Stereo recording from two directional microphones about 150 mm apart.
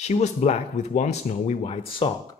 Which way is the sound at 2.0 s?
35° left (ahead or behind).